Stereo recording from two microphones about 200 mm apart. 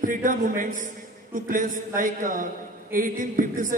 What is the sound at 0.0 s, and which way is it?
A man's voice, 40° right (ahead or behind).